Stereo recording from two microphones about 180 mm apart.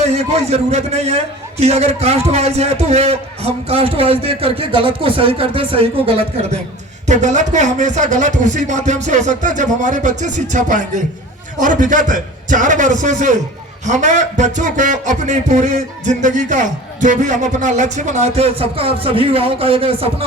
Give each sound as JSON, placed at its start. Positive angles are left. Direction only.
{"t": 0.0, "sound": "a man's voice", "side_deg": -35}